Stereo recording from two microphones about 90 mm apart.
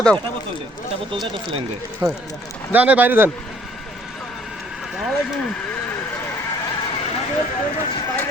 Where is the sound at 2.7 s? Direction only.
15° right (ahead or behind).